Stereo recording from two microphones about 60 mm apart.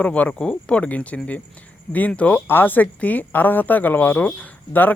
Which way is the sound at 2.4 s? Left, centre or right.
Left.